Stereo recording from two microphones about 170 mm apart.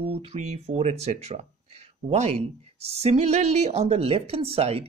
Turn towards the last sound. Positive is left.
turn(degrees=-35)  # may be behind; listen again after turning